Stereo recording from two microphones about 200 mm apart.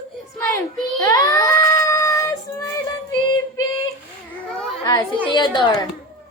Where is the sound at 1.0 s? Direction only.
20° left (ahead or behind).